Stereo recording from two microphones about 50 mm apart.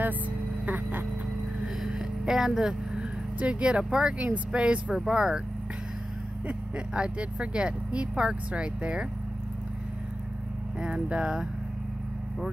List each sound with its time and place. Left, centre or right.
0.7 s a sound: right
1.8 s vehicle: centre
3.3 s speech: right
5.1 s speech: centre
6.9 s speech: right
10.8 s speech: right